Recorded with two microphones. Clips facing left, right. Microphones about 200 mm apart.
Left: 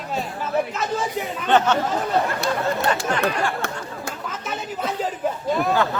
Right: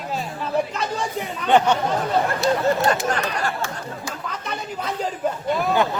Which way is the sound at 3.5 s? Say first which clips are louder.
Left 1 dB; 55° left (ahead or behind).